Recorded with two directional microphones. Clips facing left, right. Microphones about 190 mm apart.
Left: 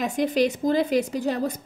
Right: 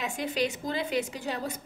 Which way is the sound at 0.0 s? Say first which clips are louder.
Left 8 dB; 45° left (ahead or behind).